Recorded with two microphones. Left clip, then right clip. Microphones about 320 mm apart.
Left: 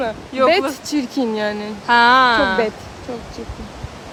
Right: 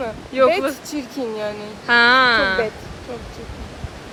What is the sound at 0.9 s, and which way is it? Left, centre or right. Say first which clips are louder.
Speech: left 5 dB; left.